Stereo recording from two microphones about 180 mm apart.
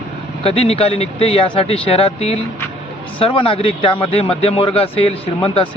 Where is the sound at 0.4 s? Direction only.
35° left (ahead or behind).